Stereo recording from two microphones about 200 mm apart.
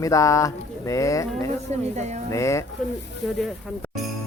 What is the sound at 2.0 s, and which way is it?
Speech, 35° right (ahead or behind).